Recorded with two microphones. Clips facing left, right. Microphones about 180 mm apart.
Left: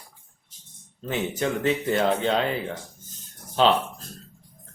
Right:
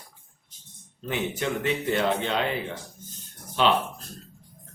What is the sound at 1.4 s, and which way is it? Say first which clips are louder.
Speech: left 5 dB; 40° left (ahead or behind).